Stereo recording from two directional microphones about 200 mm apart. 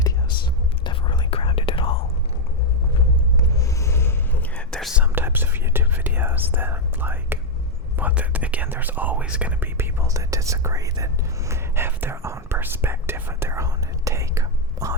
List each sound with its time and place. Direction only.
0.9 s whispering: 25° left (ahead or behind)
3.3 s whispering: 15° left (ahead or behind)
5.1 s whispering: 10° right (ahead or behind)